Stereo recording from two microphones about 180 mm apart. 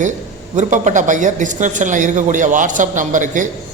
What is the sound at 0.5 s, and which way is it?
A man's voice, 45° right (ahead or behind).